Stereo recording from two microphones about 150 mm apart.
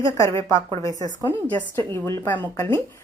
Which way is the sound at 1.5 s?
10° left (ahead or behind).